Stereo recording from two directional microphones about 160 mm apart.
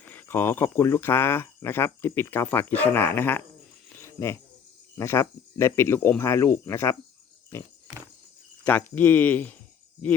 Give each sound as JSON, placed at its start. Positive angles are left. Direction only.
{"t": 0.0, "sound": "speech", "side_deg": 10}
{"t": 3.9, "sound": "cricket", "side_deg": 15}
{"t": 4.9, "sound": "speech", "side_deg": 15}